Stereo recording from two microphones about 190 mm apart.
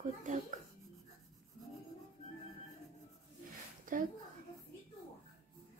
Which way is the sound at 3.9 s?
45° right (ahead or behind).